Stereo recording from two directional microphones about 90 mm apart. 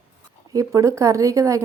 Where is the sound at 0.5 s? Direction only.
35° right (ahead or behind).